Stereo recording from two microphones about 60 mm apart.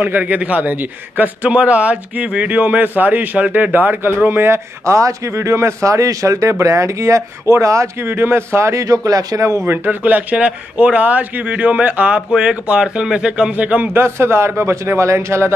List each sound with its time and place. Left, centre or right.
0.0 s a man's voice: right
4.8 s speech: right
8.0 s speech: right
8.8 s speech: right
9.6 s speech: right
10.0 s a man's voice: right
13.9 s speech: right